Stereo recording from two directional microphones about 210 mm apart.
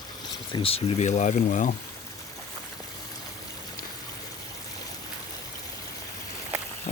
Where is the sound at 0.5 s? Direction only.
25° left (ahead or behind).